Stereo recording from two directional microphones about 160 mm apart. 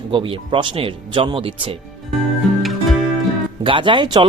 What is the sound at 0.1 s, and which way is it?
A man's voice, 30° right (ahead or behind).